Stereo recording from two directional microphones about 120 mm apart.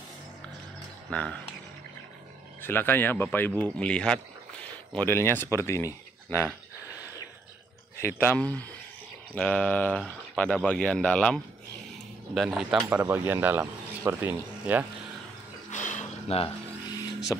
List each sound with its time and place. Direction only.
1.1 s speech: 10° left (ahead or behind)
2.6 s speech: 15° left (ahead or behind)
4.9 s speech: 20° left (ahead or behind)
8.0 s speech: 20° left (ahead or behind)
12.4 s speech: 5° right (ahead or behind)
13.0 s speech: 20° right (ahead or behind)
15.7 s a sound: 90° left; by 16.4 s 65° left (ahead or behind)
16.9 s vehicle: 35° left (ahead or behind)